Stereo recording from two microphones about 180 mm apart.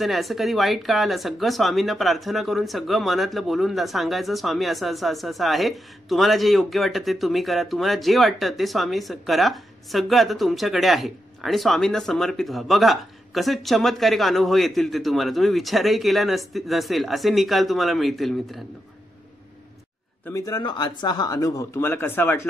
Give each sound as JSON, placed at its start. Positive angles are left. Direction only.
{"t": 0.0, "sound": "speech", "side_deg": 0}
{"t": 20.2, "sound": "speech", "side_deg": 20}